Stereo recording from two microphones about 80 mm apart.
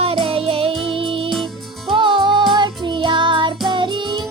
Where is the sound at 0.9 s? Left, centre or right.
Right.